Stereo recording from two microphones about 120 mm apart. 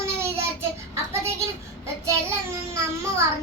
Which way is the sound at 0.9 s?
20° right (ahead or behind).